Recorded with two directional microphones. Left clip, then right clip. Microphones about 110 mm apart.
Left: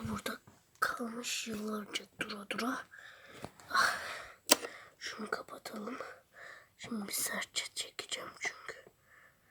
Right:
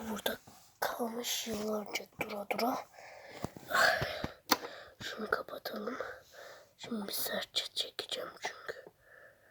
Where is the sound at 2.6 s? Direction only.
50° right (ahead or behind).